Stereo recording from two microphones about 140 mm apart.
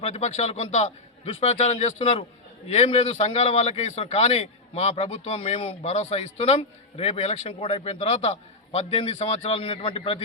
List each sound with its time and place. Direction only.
0.0 s a man's voice: 50° left (ahead or behind)